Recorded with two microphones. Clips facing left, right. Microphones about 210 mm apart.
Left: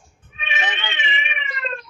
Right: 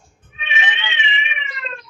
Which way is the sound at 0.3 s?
40° left (ahead or behind).